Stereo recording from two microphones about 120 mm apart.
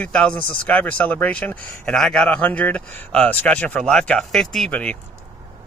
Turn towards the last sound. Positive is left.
turn(degrees=10)  # may be behind; listen again after turning